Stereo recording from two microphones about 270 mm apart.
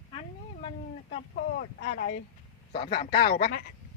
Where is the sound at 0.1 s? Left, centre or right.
Centre.